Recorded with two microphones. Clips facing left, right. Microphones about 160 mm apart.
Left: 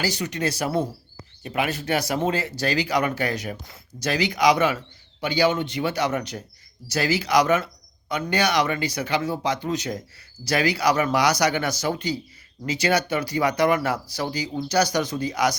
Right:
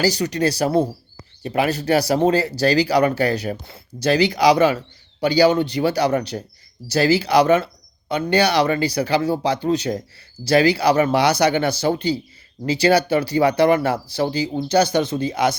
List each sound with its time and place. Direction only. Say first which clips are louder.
0.0 s speech: right 7 dB; 35° right (ahead or behind)